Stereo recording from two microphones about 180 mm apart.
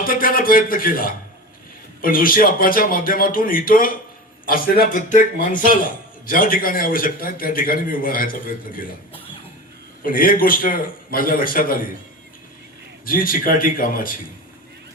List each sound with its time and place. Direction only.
0.0 s a man's voice: 50° left (ahead or behind)
10.0 s a man's voice: 50° left (ahead or behind)
13.1 s a man's voice: 50° left (ahead or behind)